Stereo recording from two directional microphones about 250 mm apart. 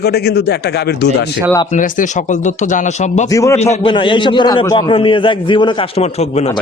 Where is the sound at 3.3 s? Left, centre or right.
Centre.